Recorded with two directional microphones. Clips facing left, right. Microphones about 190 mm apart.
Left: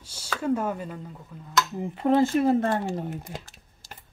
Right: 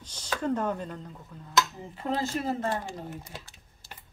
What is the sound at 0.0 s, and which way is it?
Speech, 10° left (ahead or behind).